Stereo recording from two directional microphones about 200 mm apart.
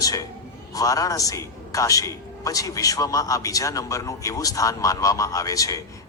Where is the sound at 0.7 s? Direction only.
15° left (ahead or behind).